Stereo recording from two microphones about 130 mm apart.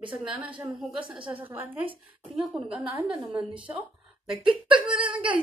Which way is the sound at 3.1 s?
40° right (ahead or behind).